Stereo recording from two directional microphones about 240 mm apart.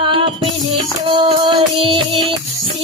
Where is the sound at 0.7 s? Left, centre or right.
Right.